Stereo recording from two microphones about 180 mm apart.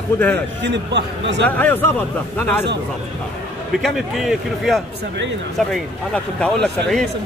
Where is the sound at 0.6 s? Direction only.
80° right.